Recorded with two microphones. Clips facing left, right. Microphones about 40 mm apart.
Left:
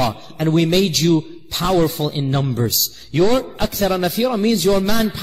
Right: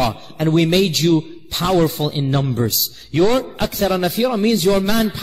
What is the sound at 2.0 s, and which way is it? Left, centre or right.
Speech, right.